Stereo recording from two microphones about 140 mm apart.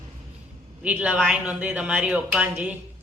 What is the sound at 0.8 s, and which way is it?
Speech, 10° right (ahead or behind).